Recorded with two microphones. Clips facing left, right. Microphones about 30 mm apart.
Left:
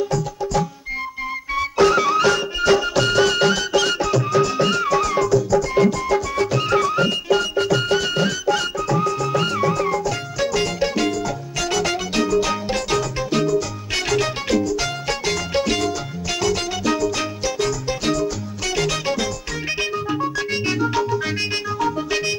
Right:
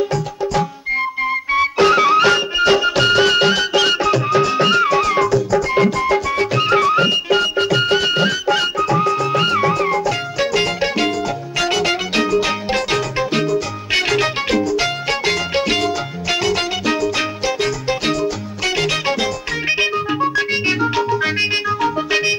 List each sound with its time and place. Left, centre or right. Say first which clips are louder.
0.1 s music: right 2 dB; right
19.7 s organ: right 5 dB; right